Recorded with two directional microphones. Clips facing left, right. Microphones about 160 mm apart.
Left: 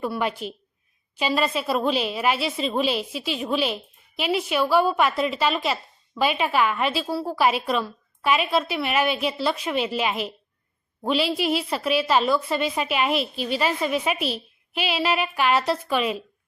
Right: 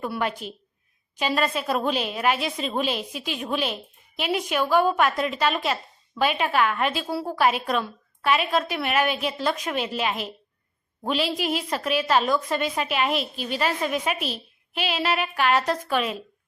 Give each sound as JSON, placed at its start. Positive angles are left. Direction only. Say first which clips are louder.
{"t": 0.0, "sound": "a woman's voice", "louder": "left 2 dB", "side_deg": 5}
{"t": 7.3, "sound": "a woman's voice", "louder": "even", "side_deg": 10}